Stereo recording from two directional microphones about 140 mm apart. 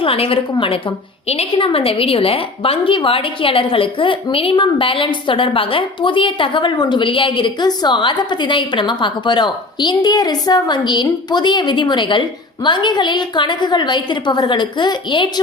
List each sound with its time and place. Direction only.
0.0 s a woman's voice: 40° left (ahead or behind)